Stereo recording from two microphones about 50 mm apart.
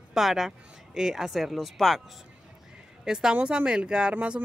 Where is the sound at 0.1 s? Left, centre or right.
Centre.